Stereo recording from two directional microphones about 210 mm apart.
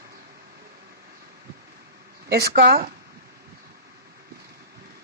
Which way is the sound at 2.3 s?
50° right (ahead or behind).